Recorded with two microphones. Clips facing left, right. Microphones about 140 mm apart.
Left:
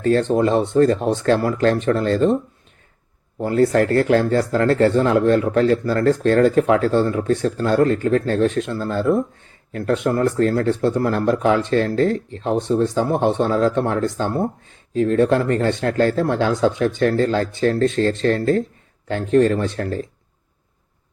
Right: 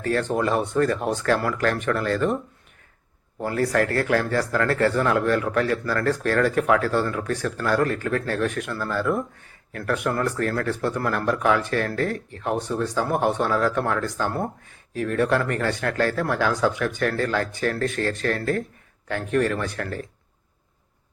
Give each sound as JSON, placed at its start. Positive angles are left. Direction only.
{"t": 0.0, "sound": "speech", "side_deg": 25}
{"t": 3.4, "sound": "speech", "side_deg": 25}